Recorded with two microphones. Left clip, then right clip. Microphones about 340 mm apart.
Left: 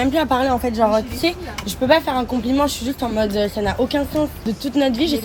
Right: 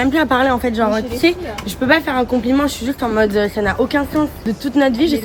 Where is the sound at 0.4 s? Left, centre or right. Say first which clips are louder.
Right 3 dB; left.